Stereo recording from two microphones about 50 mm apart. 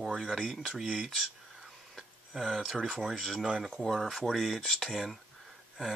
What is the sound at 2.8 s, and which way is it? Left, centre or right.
Speech, centre.